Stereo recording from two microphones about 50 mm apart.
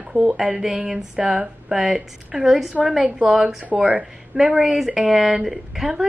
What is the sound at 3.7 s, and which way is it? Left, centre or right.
Speech, centre.